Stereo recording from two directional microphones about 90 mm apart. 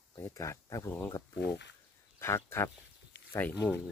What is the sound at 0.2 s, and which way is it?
Speech, 35° left (ahead or behind).